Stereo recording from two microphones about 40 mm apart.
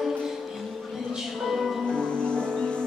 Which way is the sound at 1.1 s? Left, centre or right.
Centre.